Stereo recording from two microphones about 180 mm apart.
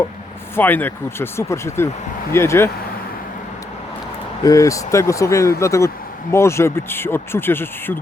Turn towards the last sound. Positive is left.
turn(degrees=10)  # may be behind; listen again after turning